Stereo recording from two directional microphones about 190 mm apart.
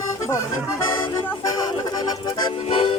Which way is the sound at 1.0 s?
15° left (ahead or behind).